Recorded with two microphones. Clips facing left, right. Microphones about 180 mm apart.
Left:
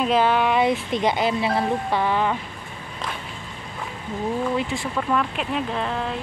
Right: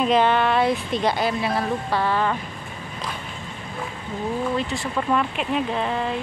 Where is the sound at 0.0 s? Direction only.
5° left (ahead or behind).